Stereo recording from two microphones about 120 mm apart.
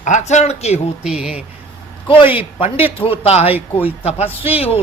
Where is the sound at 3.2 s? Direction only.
60° left (ahead or behind).